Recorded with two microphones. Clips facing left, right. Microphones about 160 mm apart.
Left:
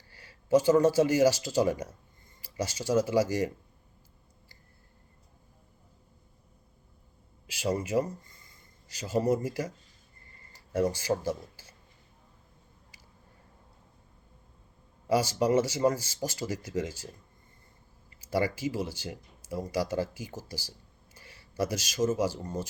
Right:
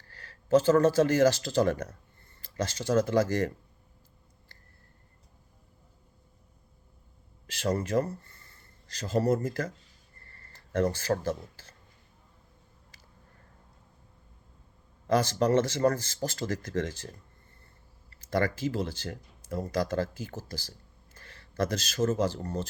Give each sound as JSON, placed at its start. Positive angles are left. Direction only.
{"t": 0.0, "sound": "speech", "side_deg": 10}
{"t": 7.4, "sound": "speech", "side_deg": 10}
{"t": 10.2, "sound": "a sound", "side_deg": 15}
{"t": 15.0, "sound": "speech", "side_deg": 10}